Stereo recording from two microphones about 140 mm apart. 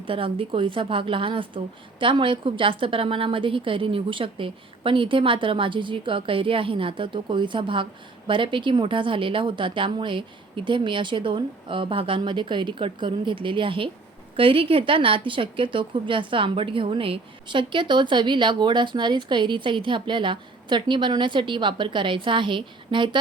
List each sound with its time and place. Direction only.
0.1 s speech: 40° right (ahead or behind)